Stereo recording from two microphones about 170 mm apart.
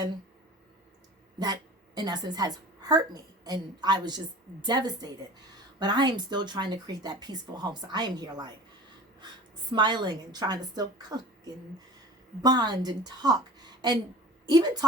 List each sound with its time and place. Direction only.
2.0 s a woman's voice: 25° right (ahead or behind)
9.7 s a woman's voice: 25° right (ahead or behind)